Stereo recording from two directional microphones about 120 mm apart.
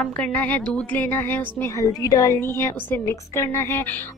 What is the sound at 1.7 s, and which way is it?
A woman's voice, 30° left (ahead or behind).